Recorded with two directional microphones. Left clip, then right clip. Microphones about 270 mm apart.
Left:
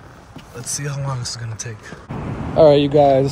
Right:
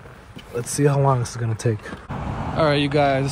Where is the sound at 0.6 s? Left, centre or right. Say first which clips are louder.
Right 8 dB; centre.